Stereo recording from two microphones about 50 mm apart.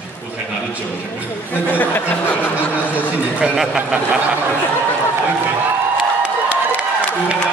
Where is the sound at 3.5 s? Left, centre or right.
Centre.